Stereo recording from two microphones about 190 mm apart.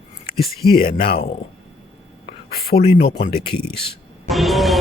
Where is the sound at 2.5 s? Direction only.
55° left (ahead or behind).